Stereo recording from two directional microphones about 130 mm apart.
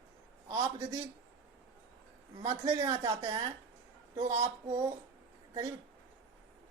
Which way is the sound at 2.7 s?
30° right (ahead or behind).